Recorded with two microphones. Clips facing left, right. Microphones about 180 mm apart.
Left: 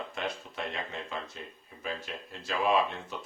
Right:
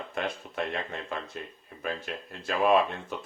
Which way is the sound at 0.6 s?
55° right (ahead or behind).